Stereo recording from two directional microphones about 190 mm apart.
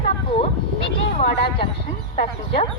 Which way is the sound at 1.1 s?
30° left (ahead or behind).